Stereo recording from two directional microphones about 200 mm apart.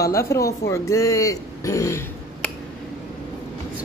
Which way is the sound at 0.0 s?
15° left (ahead or behind).